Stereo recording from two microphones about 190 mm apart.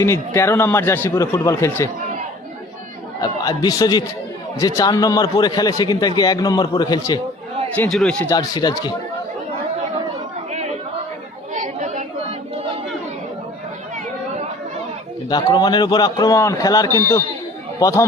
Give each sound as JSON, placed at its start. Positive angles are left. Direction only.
{"t": 0.0, "sound": "speech", "side_deg": 15}
{"t": 3.2, "sound": "a man's voice", "side_deg": 20}
{"t": 7.8, "sound": "speech", "side_deg": 5}
{"t": 8.3, "sound": "a man's voice", "side_deg": 20}
{"t": 10.5, "sound": "chatter", "side_deg": -35}
{"t": 15.3, "sound": "a man's voice", "side_deg": 20}